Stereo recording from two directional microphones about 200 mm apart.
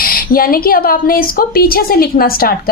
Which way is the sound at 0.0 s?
45° left (ahead or behind).